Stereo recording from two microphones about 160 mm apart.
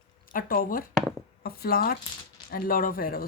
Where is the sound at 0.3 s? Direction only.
65° left (ahead or behind).